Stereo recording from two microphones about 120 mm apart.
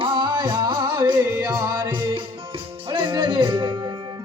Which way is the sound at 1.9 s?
45° right (ahead or behind).